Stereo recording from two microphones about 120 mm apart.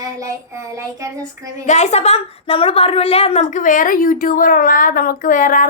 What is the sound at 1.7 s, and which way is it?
A woman's voice, 70° left (ahead or behind).